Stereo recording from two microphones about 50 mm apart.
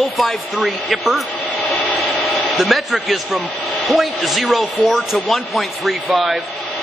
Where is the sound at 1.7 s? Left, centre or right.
Left.